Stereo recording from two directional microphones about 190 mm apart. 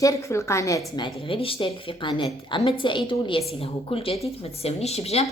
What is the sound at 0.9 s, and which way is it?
Speech, 25° left (ahead or behind).